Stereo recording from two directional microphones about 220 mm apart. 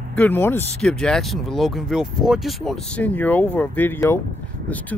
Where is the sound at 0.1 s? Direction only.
10° left (ahead or behind).